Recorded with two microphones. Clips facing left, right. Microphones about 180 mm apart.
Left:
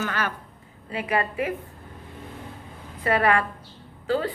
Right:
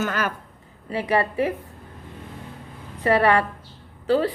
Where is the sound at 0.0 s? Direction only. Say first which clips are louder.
Right 3 dB; 45° right (ahead or behind).